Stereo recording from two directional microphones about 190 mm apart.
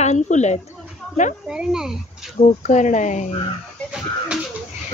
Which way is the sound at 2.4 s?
40° left (ahead or behind).